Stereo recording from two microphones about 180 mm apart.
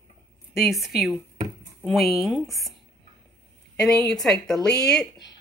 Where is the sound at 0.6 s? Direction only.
Centre (ahead or behind).